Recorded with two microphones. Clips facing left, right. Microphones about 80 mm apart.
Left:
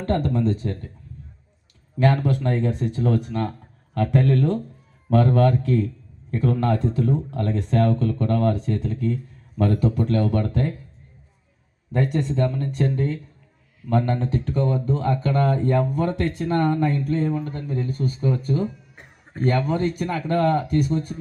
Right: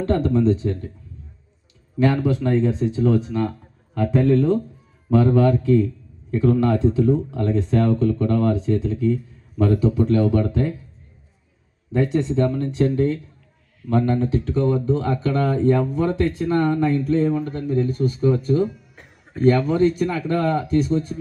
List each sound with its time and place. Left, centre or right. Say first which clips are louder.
0.0 s a sound: right 2 dB; left
0.3 s speech: right 5 dB; left
2.0 s speech: right 2 dB; left
11.9 s speech: right 3 dB; left
13.9 s speech: right 3 dB; left